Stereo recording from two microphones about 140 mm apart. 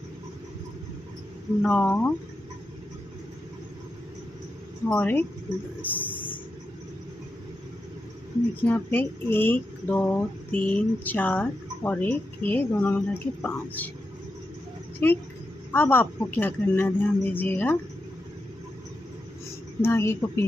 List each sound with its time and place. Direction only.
1.6 s speech: 10° left (ahead or behind)
4.8 s speech: 10° left (ahead or behind)
8.6 s speech: 15° left (ahead or behind)
15.0 s speech: 15° left (ahead or behind)
19.8 s speech: 15° left (ahead or behind)